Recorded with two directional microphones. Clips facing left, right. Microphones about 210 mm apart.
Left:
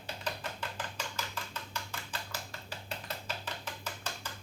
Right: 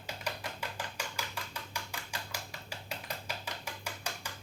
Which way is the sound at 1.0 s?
10° right (ahead or behind).